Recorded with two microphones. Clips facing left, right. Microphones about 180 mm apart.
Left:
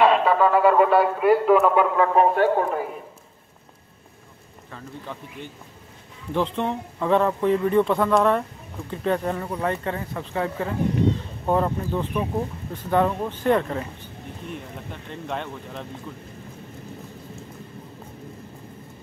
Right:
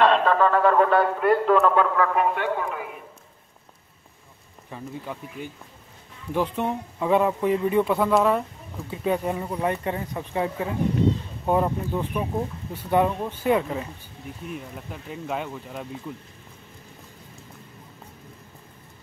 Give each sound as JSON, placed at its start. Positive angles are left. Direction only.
{"t": 0.0, "sound": "a sound", "side_deg": 10}
{"t": 2.1, "sound": "a man's voice", "side_deg": 35}
{"t": 4.6, "sound": "speech", "side_deg": -10}